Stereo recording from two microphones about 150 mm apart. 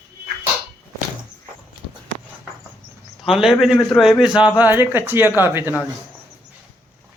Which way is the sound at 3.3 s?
5° right (ahead or behind).